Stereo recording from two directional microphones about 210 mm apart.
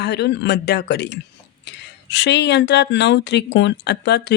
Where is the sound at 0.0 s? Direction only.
50° left (ahead or behind).